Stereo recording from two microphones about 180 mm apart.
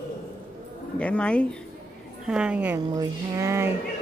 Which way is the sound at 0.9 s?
5° left (ahead or behind).